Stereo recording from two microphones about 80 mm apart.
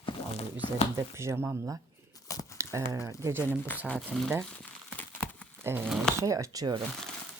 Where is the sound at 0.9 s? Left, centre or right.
Right.